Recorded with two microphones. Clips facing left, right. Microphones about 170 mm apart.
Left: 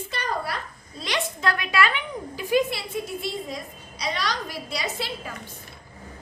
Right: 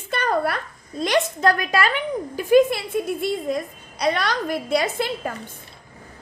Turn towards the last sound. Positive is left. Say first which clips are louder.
# right 7 dB
turn(degrees=-50)  # may be behind; listen again after turning